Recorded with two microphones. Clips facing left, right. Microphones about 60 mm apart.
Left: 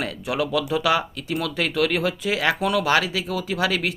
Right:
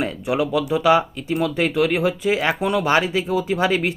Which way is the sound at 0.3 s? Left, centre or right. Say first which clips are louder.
Right 3 dB; right.